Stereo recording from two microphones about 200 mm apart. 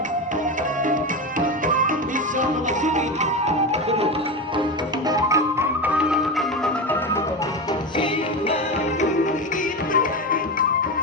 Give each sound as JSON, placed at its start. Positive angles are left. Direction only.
{"t": 1.4, "sound": "music", "side_deg": -40}
{"t": 5.0, "sound": "music", "side_deg": -15}